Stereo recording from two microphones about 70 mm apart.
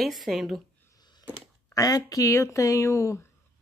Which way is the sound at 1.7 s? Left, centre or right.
Left.